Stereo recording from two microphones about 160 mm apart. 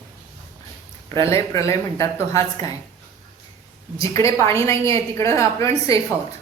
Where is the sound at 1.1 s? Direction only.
20° left (ahead or behind).